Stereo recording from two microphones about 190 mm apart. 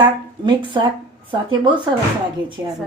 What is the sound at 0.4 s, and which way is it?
Speech, 25° right (ahead or behind).